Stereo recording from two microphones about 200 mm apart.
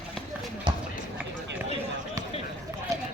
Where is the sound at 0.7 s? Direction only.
25° right (ahead or behind).